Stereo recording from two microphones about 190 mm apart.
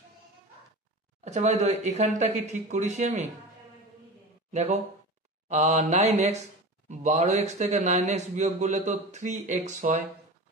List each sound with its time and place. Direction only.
1.2 s a man's voice: 35° right (ahead or behind)
4.5 s a man's voice: 35° right (ahead or behind)